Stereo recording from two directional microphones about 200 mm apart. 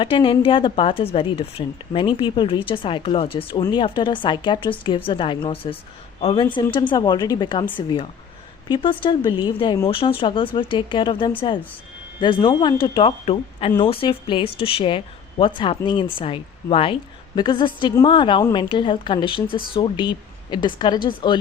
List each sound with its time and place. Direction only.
0.0 s speech: 25° left (ahead or behind)